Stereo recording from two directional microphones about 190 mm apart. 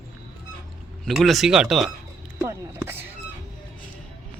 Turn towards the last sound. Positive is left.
turn(degrees=-10)  # may be behind; listen again after turning